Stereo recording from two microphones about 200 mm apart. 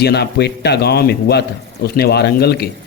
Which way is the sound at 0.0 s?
55° left (ahead or behind).